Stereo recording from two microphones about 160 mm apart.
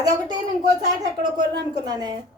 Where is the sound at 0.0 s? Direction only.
25° right (ahead or behind).